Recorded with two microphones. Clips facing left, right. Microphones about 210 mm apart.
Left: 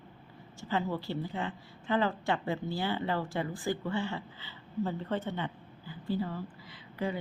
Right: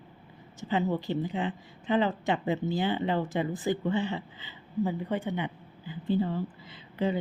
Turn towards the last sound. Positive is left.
turn(degrees=-20)  # may be behind; listen again after turning